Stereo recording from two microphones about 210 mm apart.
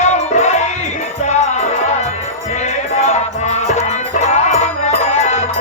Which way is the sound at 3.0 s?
30° left (ahead or behind).